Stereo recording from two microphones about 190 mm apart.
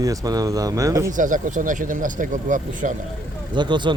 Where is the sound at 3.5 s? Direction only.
25° right (ahead or behind).